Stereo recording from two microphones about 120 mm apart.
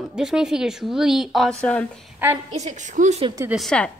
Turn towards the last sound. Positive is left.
turn(degrees=5)  # may be behind; listen again after turning